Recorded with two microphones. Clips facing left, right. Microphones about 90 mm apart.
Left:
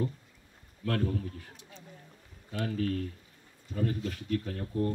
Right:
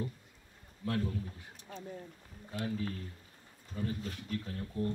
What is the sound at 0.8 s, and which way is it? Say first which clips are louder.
Speech: left 4 dB; 70° left (ahead or behind).